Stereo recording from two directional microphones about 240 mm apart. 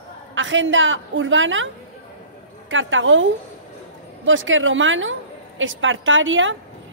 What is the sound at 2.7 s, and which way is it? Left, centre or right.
A man's voice, right.